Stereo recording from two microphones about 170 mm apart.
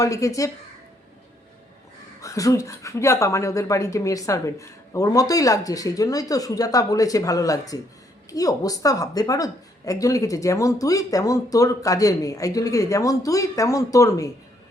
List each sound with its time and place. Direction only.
0.0 s speech: 20° left (ahead or behind)
2.2 s speech: 20° left (ahead or behind)